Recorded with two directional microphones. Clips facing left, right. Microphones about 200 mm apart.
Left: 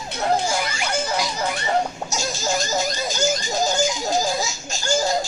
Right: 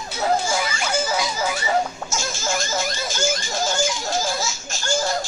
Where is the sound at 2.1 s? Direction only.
40° left (ahead or behind).